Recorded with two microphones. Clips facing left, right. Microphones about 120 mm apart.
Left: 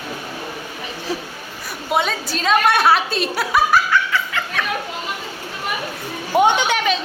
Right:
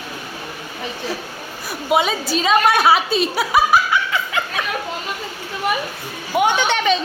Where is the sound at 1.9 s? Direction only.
5° right (ahead or behind).